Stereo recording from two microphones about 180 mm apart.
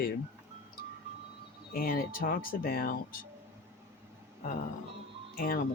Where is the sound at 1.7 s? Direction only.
55° left (ahead or behind).